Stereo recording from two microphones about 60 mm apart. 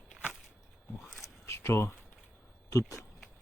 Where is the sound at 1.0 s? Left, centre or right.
Centre.